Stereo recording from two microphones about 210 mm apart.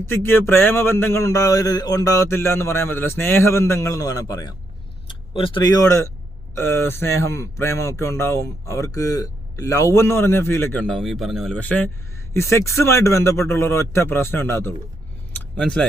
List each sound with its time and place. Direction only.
0.0 s speech: 10° left (ahead or behind)